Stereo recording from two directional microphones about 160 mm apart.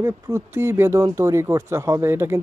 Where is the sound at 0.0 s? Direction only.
15° right (ahead or behind).